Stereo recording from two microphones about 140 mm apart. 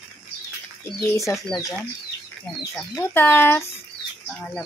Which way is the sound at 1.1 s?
20° left (ahead or behind).